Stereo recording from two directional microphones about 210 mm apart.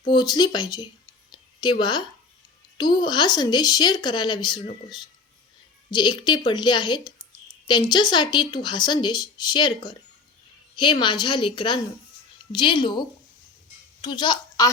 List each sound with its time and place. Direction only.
0.0 s speech: 20° left (ahead or behind)
1.3 s a sound: 20° left (ahead or behind)
2.7 s speech: 20° left (ahead or behind)
11.0 s speech: 20° left (ahead or behind)